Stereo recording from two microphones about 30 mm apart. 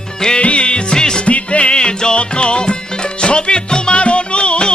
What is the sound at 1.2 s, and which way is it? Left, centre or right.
Music, left.